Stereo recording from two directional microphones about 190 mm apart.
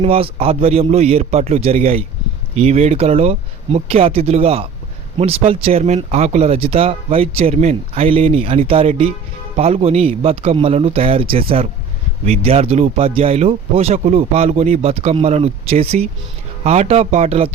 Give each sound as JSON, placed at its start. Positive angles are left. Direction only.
{"t": 0.0, "sound": "speech", "side_deg": -30}